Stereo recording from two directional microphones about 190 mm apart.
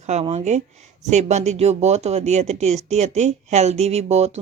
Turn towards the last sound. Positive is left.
turn(degrees=-35)  # may be behind; listen again after turning